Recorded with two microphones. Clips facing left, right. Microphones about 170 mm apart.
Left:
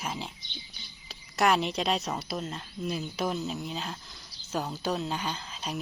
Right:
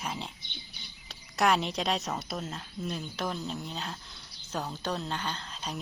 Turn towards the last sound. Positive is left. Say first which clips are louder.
# left 2 dB
turn(degrees=5)  # may be behind; listen again after turning